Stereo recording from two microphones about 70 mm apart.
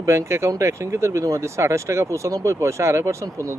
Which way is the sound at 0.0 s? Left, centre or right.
Right.